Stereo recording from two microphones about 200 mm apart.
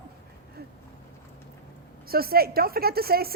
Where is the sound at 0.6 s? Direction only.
50° right (ahead or behind).